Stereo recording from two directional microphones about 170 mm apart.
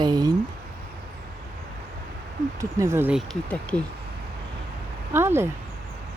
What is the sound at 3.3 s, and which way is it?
Speech, 5° left (ahead or behind).